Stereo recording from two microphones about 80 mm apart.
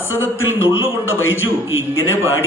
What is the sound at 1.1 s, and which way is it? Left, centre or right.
Speech, left.